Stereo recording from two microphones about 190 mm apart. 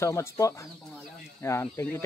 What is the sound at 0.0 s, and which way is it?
Speech, 15° left (ahead or behind).